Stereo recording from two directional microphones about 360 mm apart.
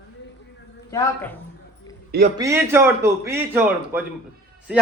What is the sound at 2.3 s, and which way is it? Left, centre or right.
A man's voice, centre.